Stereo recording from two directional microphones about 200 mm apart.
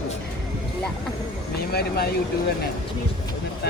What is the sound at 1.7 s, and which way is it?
Speech, 50° left (ahead or behind).